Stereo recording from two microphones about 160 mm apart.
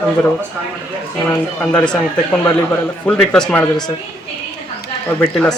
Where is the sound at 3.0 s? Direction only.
5° left (ahead or behind).